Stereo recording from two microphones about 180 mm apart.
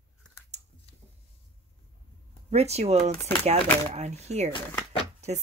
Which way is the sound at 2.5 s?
35° right (ahead or behind).